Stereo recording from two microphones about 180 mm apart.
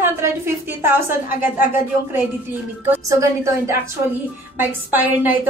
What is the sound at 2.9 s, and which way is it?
Speech, 15° right (ahead or behind).